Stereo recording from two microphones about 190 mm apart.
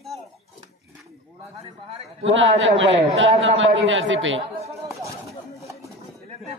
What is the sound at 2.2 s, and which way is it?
A man's voice, 85° right.